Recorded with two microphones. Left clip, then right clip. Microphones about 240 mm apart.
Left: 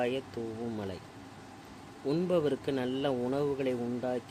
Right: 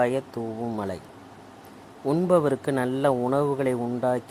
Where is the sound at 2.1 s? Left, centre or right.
Centre.